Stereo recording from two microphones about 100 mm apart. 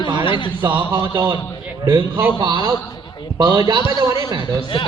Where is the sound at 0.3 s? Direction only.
55° left (ahead or behind).